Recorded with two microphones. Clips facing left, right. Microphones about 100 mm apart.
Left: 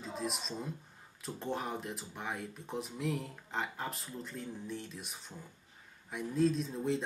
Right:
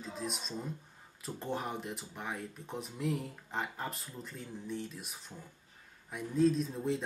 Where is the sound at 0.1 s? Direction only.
Centre (ahead or behind).